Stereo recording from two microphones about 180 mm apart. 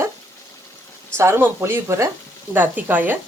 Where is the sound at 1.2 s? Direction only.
15° right (ahead or behind).